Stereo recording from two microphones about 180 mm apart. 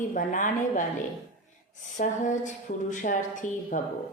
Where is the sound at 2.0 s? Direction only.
45° left (ahead or behind).